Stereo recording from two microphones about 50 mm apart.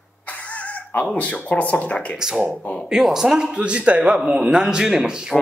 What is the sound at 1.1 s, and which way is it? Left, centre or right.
Speech, left.